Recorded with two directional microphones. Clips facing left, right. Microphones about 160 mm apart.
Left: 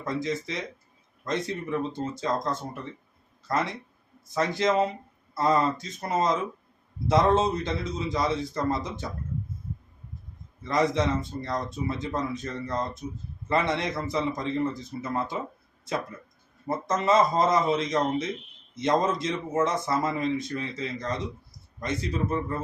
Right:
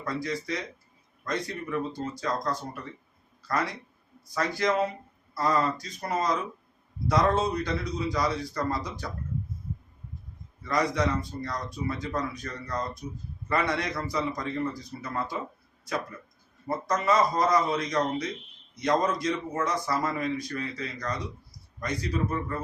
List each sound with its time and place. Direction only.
0.0 s a man's voice: 20° left (ahead or behind)
10.6 s a man's voice: 25° left (ahead or behind)